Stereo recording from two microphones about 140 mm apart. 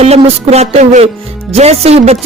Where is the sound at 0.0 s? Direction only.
50° right (ahead or behind).